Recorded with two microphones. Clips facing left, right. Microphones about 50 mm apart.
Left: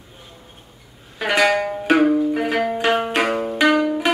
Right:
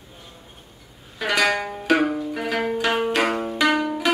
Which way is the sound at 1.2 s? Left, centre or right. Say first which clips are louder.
Left 4 dB; centre.